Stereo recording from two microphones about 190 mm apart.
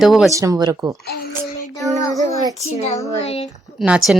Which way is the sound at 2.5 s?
35° left (ahead or behind).